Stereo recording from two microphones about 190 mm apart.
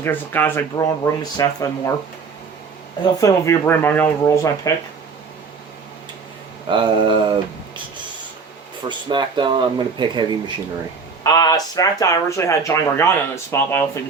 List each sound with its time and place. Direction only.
0.0 s speech: 10° left (ahead or behind)
3.0 s speech: 20° left (ahead or behind)
6.7 s speech: 25° right (ahead or behind)
8.9 s speech: 25° right (ahead or behind)
11.2 s speech: 20° left (ahead or behind)